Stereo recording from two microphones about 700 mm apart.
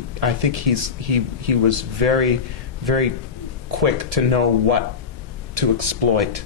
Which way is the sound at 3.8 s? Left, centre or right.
Right.